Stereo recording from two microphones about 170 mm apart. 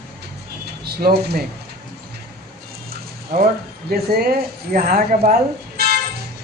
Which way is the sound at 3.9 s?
65° right (ahead or behind).